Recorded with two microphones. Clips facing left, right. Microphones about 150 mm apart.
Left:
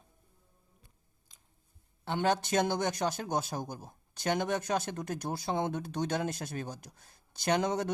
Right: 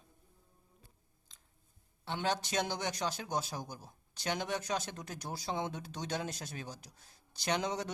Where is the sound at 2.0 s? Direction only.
50° left (ahead or behind).